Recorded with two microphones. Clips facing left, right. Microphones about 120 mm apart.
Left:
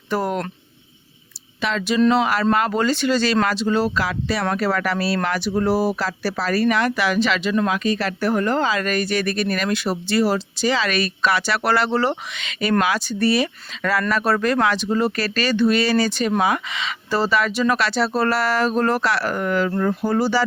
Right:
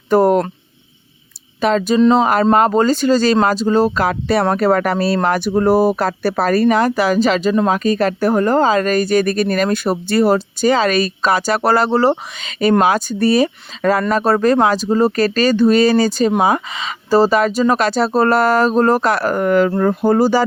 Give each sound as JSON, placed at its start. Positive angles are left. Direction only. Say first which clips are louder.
{"t": 0.1, "sound": "speech", "louder": "right 10 dB", "side_deg": -45}
{"t": 1.6, "sound": "speech", "louder": "right 8 dB", "side_deg": -40}
{"t": 2.0, "sound": "speech", "louder": "right 4 dB", "side_deg": -25}